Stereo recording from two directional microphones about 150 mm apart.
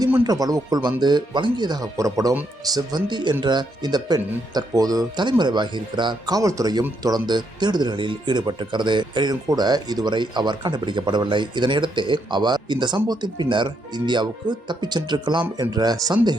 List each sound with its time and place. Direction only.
0.3 s speech: 25° right (ahead or behind)